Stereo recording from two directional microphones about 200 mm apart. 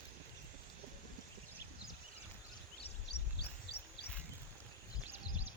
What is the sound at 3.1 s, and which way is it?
Wild animals, 55° left (ahead or behind).